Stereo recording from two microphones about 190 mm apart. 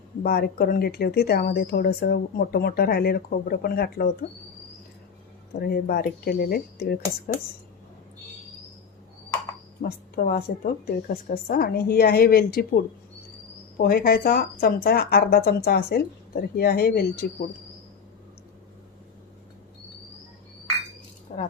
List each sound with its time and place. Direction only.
0.2 s speech: 55° left (ahead or behind)
5.5 s speech: 55° left (ahead or behind)
9.8 s speech: 50° left (ahead or behind)
21.3 s keys jangling: 40° left (ahead or behind)